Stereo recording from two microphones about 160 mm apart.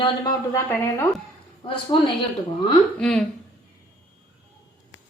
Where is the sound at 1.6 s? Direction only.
30° left (ahead or behind).